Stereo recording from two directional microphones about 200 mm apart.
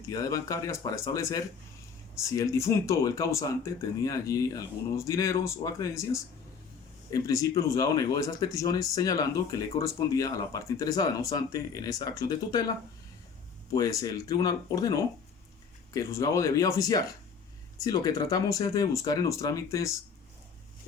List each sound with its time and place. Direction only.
0.1 s speech: 15° left (ahead or behind)
7.1 s speech: 15° left (ahead or behind)